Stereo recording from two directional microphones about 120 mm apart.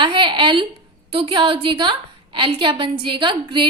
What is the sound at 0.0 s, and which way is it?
A woman's voice, 45° right (ahead or behind).